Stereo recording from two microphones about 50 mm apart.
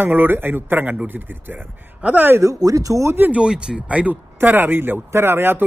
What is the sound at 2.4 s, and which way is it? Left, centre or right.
Speech, right.